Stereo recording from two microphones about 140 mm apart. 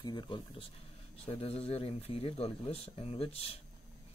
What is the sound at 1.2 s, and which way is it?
Speech, 45° left (ahead or behind).